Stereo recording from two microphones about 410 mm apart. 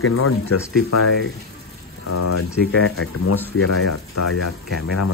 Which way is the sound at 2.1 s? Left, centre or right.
Left.